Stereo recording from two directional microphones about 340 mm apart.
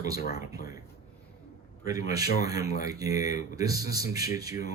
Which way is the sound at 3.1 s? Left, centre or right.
Left.